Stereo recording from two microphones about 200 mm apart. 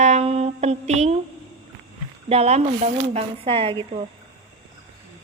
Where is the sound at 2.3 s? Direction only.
30° right (ahead or behind).